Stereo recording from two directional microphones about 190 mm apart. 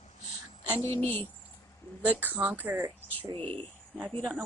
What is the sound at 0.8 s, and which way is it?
Speech, 15° left (ahead or behind).